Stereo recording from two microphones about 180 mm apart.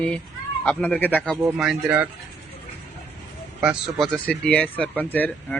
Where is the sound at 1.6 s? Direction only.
5° right (ahead or behind).